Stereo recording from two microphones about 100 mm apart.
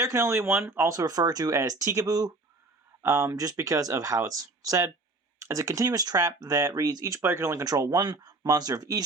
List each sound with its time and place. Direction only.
0.0 s speech: 30° right (ahead or behind)
0.9 s speech: 35° right (ahead or behind)